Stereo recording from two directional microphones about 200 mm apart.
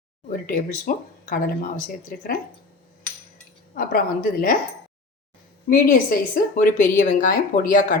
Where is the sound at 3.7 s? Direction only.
50° left (ahead or behind).